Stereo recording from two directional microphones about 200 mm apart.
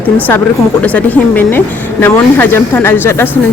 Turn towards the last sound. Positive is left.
turn(degrees=10)  # may be behind; listen again after turning